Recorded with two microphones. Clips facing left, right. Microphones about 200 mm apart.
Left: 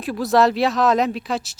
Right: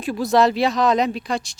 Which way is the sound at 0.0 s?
Centre (ahead or behind).